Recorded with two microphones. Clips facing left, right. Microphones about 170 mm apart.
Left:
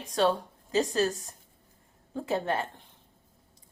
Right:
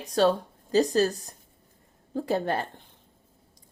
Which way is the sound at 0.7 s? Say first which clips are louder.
Right 4 dB; 35° right (ahead or behind).